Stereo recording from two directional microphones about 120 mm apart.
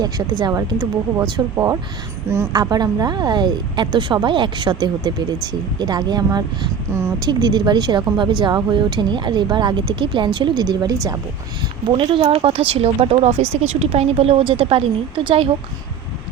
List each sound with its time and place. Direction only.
0.0 s speech: 35° right (ahead or behind)
1.5 s speech: 25° right (ahead or behind)
11.9 s a woman's voice: 45° right (ahead or behind)